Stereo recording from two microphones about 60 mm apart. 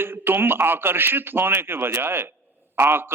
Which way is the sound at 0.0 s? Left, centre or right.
Right.